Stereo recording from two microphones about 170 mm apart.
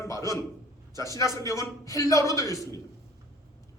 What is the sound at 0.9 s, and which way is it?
A man's voice, 20° left (ahead or behind).